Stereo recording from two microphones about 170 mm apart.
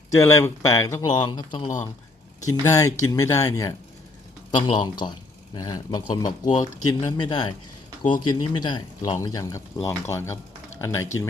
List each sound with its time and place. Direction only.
0.1 s speech: 20° left (ahead or behind)
1.6 s speech: 50° left (ahead or behind)
2.6 s speech: 20° left (ahead or behind)